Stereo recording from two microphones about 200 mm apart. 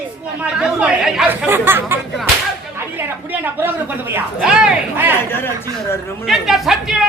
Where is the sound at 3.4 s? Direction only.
10° right (ahead or behind).